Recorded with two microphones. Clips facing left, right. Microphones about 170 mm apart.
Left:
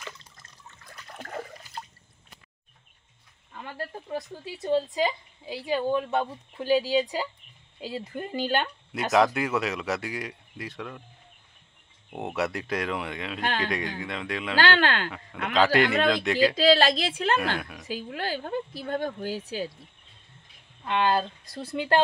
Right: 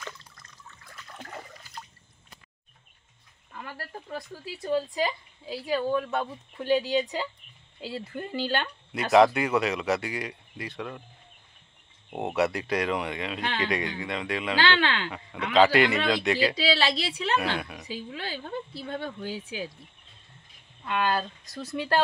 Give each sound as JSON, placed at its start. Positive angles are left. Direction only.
{"t": 3.6, "sound": "speech", "side_deg": 20}
{"t": 9.1, "sound": "speech", "side_deg": 0}
{"t": 12.2, "sound": "speech", "side_deg": 0}
{"t": 13.4, "sound": "speech", "side_deg": 45}
{"t": 13.7, "sound": "speech", "side_deg": 0}
{"t": 14.6, "sound": "speech", "side_deg": 45}
{"t": 15.5, "sound": "speech", "side_deg": 0}
{"t": 16.5, "sound": "speech", "side_deg": 50}
{"t": 17.6, "sound": "a woman's voice", "side_deg": 0}
{"t": 17.8, "sound": "speech", "side_deg": 50}
{"t": 20.8, "sound": "speech", "side_deg": 25}